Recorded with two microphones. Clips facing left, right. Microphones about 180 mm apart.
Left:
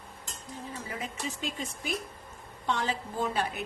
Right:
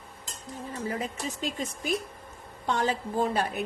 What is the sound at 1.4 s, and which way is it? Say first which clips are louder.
A woman's voice: right 4 dB; 40° right (ahead or behind).